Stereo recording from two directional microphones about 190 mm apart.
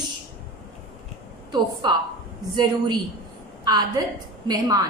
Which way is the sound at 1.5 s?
20° right (ahead or behind).